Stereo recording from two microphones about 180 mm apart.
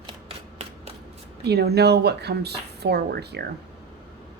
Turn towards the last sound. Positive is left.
turn(degrees=-65)  # may be behind; listen again after turning